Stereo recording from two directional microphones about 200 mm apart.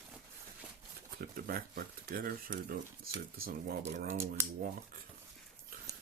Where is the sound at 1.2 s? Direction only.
45° right (ahead or behind).